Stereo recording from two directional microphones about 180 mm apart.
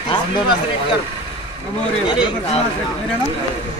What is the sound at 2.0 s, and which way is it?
Speech, 25° left (ahead or behind).